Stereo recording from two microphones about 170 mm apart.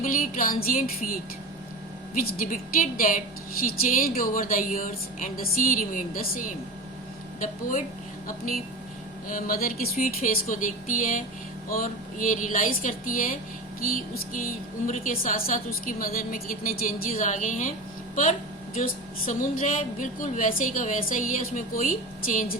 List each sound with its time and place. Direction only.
0.0 s a woman's voice: 55° left (ahead or behind)
9.3 s a woman's voice: 55° left (ahead or behind)